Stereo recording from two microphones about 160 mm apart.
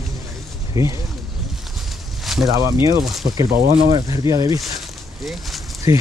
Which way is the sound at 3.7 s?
25° right (ahead or behind).